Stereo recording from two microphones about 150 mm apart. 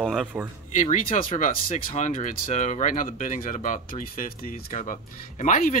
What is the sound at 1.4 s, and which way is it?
Speech, 60° left (ahead or behind).